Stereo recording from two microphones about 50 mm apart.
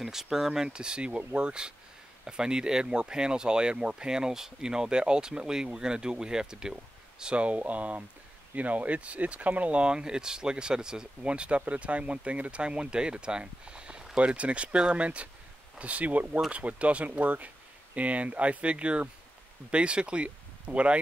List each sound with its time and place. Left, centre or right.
0.0 s speech: centre; by 21.0 s right